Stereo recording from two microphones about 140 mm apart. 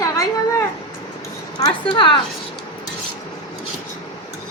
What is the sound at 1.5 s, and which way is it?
Speech, 35° left (ahead or behind).